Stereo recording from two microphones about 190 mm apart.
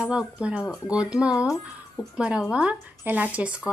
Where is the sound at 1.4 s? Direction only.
15° left (ahead or behind).